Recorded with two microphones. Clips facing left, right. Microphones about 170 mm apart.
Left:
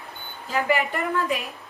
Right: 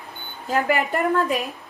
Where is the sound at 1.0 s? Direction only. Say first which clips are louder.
Right 4 dB; 40° right (ahead or behind).